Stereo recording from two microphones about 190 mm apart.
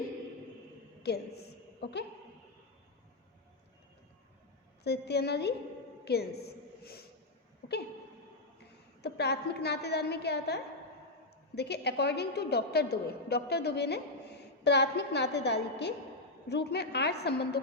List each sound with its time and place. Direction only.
1.0 s a woman's voice: 55° left (ahead or behind)
4.8 s a woman's voice: 60° left (ahead or behind)
6.1 s a sound: 55° left (ahead or behind)
9.0 s a woman's voice: 60° left (ahead or behind)